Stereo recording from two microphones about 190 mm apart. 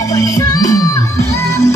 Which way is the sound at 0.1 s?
15° left (ahead or behind).